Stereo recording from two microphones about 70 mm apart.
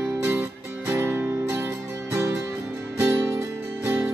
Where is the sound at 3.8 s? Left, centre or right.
Right.